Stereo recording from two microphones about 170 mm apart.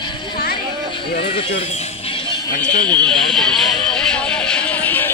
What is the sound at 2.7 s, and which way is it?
Speech, 25° right (ahead or behind).